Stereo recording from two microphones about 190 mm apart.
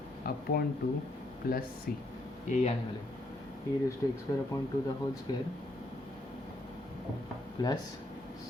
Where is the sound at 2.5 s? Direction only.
40° left (ahead or behind).